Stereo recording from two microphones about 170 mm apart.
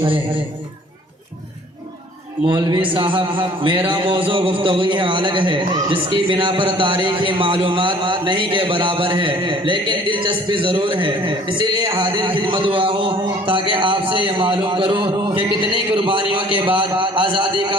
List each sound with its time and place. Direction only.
2.5 s a man's voice: 30° right (ahead or behind)